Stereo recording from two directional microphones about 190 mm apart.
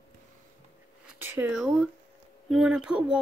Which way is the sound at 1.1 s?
10° right (ahead or behind).